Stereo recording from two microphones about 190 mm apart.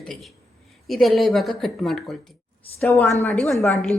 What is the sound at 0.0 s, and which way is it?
A woman's voice, centre (ahead or behind).